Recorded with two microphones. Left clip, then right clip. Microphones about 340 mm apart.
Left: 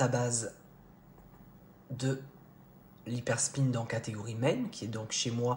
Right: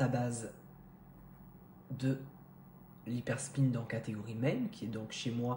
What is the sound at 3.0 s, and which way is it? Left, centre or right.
Speech, left.